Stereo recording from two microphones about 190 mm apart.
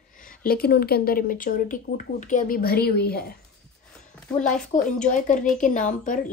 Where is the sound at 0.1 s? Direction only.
45° left (ahead or behind).